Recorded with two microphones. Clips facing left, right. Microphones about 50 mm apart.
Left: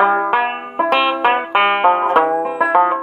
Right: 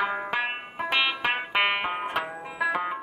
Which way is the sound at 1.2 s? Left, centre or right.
Left.